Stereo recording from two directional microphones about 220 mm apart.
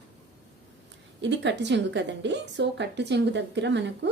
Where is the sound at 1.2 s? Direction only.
55° right (ahead or behind).